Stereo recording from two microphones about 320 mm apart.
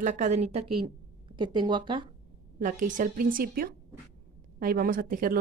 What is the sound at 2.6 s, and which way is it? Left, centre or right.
A woman's voice, right.